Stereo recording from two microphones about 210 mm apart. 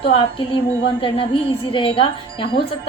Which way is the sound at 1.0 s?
25° left (ahead or behind).